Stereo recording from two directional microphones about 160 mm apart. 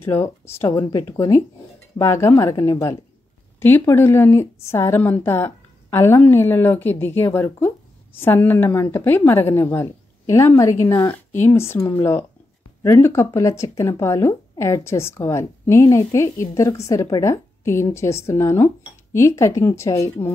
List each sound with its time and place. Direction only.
0.0 s a woman's voice: 15° left (ahead or behind)